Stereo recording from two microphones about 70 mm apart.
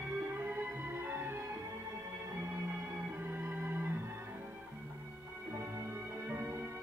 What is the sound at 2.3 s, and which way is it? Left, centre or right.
Organ, right.